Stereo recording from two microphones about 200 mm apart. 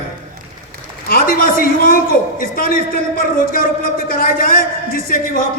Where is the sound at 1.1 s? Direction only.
45° left (ahead or behind).